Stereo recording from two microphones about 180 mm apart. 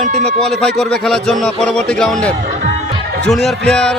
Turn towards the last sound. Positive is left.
turn(degrees=5)  # may be behind; listen again after turning